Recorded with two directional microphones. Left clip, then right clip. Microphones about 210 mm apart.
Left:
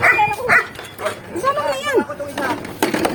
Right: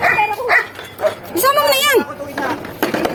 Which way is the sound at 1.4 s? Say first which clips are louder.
Right 6 dB; 10° right (ahead or behind).